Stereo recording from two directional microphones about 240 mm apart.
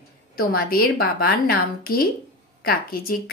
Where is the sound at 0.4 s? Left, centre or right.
Left.